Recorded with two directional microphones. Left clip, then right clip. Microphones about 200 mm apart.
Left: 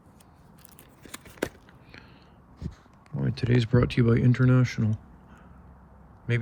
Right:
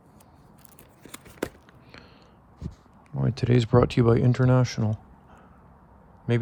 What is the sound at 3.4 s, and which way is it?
Speech, 30° right (ahead or behind).